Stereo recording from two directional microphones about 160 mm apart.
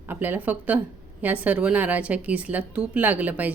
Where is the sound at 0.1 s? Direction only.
10° right (ahead or behind).